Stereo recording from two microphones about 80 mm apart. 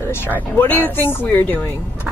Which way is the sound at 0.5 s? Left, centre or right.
Left.